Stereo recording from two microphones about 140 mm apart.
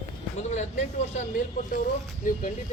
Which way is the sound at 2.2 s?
75° left (ahead or behind).